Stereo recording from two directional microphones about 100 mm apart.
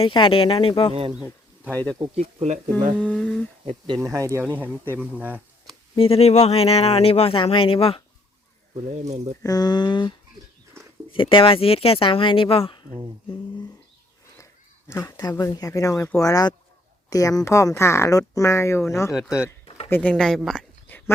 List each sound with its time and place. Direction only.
0.0 s speech: 60° left (ahead or behind)
2.0 s speech: 50° right (ahead or behind)
2.7 s speech: 15° left (ahead or behind)
4.0 s speech: 30° right (ahead or behind); by 5.4 s 15° right (ahead or behind)
6.0 s speech: 80° left
9.4 s speech: 40° left (ahead or behind); by 12.8 s 65° left (ahead or behind)
14.8 s speech: 25° left (ahead or behind)
15.1 s speech: 40° left (ahead or behind)
19.1 s speech: 5° right (ahead or behind)
19.6 s a sound: 75° left (ahead or behind)
19.9 s speech: 10° left (ahead or behind)
20.9 s dog: 20° left (ahead or behind)